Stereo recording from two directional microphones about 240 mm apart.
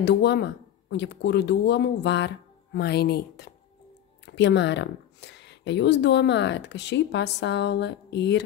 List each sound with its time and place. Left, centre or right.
0.0 s speech: left